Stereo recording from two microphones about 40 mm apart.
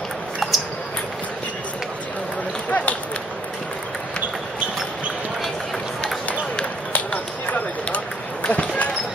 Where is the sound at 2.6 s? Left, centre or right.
Left.